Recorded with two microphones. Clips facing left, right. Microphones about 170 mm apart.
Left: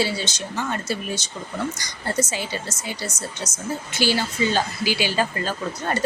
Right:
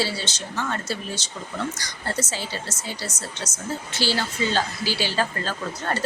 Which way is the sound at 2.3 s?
15° left (ahead or behind).